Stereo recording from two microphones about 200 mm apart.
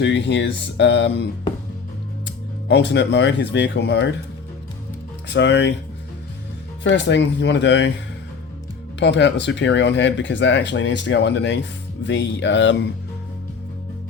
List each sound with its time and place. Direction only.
0.0 s speech: 60° left (ahead or behind)
5.3 s speech: 60° left (ahead or behind)
6.8 s speech: 65° left (ahead or behind)
9.0 s speech: 60° left (ahead or behind)